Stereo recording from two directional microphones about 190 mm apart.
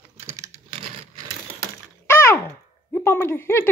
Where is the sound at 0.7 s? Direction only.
30° right (ahead or behind).